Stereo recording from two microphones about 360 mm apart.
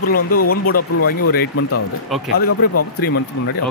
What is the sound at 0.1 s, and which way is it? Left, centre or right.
Speech, left.